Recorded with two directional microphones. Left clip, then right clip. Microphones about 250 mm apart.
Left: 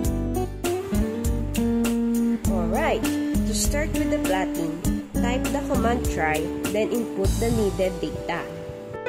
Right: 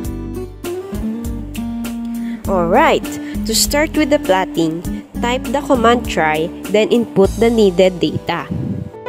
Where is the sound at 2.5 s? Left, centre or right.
Right.